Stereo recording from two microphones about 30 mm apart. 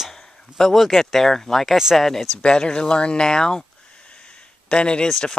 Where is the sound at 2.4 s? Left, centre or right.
Left.